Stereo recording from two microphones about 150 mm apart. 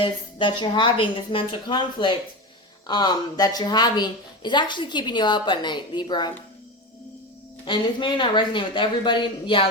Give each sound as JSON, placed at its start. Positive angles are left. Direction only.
{"t": 0.0, "sound": "a woman's voice", "side_deg": 30}
{"t": 7.6, "sound": "a woman's voice", "side_deg": 30}